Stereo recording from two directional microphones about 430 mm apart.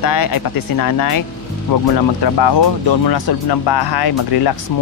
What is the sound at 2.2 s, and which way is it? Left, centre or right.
Speech, left.